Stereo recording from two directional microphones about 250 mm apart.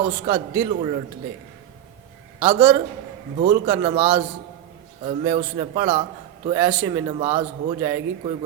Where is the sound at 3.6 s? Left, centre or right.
Centre.